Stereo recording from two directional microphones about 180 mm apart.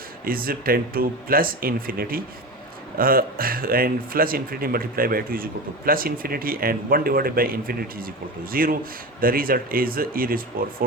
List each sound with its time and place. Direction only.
0.3 s speech: 55° right (ahead or behind)